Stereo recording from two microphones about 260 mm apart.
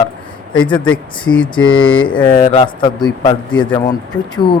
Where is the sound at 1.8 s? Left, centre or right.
Centre.